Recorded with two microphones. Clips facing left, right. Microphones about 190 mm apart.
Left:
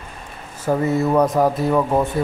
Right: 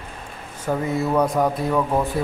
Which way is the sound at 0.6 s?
5° left (ahead or behind).